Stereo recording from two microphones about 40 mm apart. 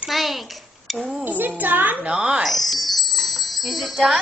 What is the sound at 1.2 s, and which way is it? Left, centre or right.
Music, right.